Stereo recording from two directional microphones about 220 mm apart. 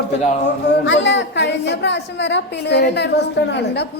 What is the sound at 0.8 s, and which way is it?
A woman's voice, 55° left (ahead or behind).